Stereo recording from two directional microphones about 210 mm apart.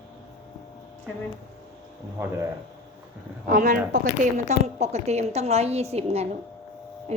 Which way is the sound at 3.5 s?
40° right (ahead or behind).